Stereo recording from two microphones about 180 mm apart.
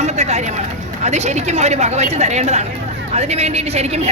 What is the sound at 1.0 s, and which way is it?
A woman's voice, 40° right (ahead or behind).